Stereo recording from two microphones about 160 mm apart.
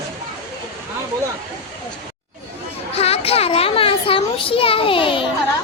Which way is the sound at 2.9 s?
40° left (ahead or behind).